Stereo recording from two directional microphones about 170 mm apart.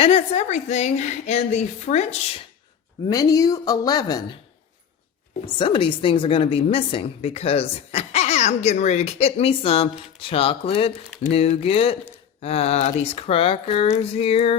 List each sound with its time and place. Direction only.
0.0 s a woman's voice: 40° left (ahead or behind)
3.1 s a woman's voice: 20° left (ahead or behind)
5.5 s a woman's voice: 30° left (ahead or behind)